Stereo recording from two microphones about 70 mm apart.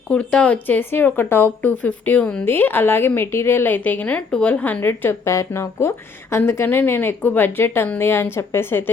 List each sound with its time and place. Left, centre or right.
0.1 s speech: centre
0.8 s a woman's voice: left
2.4 s a woman's voice: left
3.8 s a woman's voice: left
4.8 s a woman's voice: left